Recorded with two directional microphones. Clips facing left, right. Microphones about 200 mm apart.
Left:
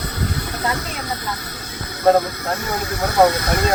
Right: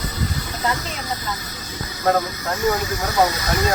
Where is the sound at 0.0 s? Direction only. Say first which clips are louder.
Left 2 dB; 60° left (ahead or behind).